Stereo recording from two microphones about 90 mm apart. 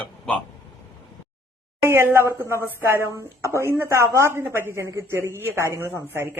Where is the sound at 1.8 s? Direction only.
25° right (ahead or behind).